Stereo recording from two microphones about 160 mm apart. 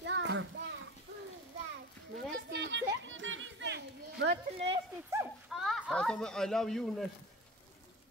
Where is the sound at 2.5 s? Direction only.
90° right.